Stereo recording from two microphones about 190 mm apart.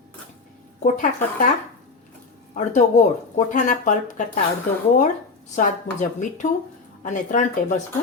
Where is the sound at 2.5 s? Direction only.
40° left (ahead or behind).